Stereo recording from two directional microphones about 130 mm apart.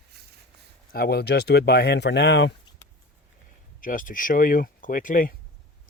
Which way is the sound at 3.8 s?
90° left.